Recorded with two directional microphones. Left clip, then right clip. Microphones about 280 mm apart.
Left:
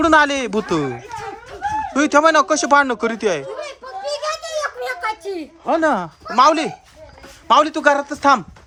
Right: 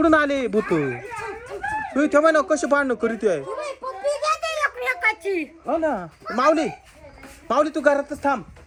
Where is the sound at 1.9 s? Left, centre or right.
Centre.